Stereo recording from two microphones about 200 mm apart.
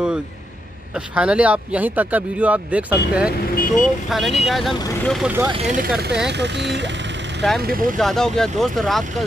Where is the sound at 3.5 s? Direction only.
45° left (ahead or behind).